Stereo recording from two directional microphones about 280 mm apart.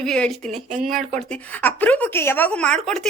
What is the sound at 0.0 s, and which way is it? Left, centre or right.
Speech, centre.